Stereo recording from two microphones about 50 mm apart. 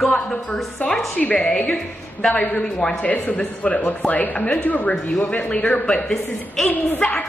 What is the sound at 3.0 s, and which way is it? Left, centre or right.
Speech, left.